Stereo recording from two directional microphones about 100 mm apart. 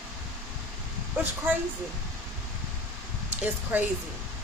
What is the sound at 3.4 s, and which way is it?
Speech, 15° right (ahead or behind).